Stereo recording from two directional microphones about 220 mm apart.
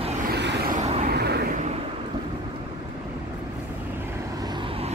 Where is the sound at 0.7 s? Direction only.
30° right (ahead or behind).